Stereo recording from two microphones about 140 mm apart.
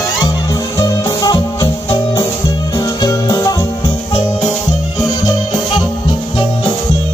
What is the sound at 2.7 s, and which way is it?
Music, 25° left (ahead or behind).